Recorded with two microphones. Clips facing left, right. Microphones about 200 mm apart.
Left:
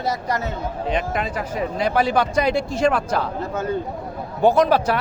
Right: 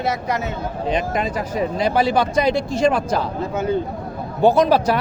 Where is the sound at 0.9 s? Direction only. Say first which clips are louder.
Right 3 dB; 40° right (ahead or behind).